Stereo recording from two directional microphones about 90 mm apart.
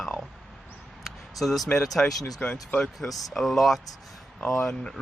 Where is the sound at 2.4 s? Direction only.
15° left (ahead or behind).